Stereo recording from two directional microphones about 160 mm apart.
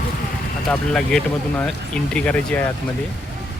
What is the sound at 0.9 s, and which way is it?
Speech, 5° left (ahead or behind).